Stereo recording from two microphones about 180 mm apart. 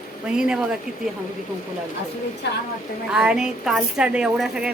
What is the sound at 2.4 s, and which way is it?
Speech, 75° left (ahead or behind).